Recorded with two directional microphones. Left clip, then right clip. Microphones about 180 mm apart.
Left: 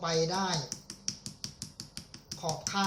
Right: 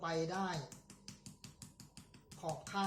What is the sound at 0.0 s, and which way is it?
Speech, 20° right (ahead or behind).